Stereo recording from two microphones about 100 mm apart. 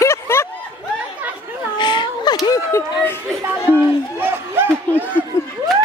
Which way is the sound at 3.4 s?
20° right (ahead or behind).